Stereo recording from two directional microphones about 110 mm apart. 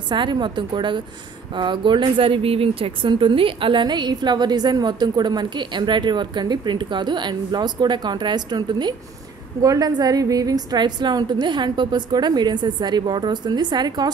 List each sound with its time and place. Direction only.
0.1 s a woman's voice: 45° right (ahead or behind)